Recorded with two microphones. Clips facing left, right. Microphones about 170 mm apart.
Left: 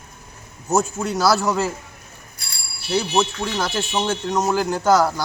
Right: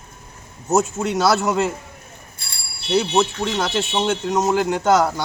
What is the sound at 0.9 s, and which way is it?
Speech, centre (ahead or behind).